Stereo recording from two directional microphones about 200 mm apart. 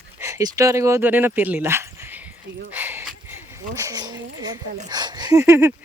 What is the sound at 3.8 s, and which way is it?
Speech, 20° right (ahead or behind).